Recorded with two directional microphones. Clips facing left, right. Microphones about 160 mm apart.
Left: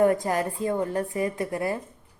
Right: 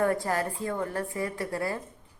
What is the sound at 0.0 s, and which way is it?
A woman's voice, 20° left (ahead or behind).